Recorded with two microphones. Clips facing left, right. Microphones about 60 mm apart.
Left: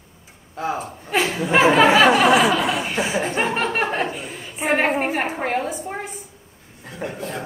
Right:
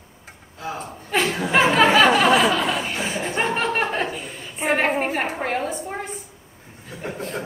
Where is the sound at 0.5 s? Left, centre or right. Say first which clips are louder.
Left 6 dB; left.